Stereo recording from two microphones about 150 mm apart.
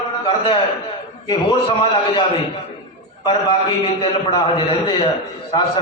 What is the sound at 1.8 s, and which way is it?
Speech, 40° left (ahead or behind).